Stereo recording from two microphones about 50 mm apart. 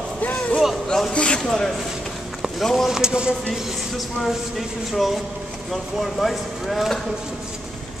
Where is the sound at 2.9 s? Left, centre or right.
Centre.